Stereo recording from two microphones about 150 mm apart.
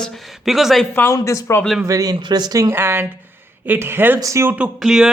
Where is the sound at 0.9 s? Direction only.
15° left (ahead or behind).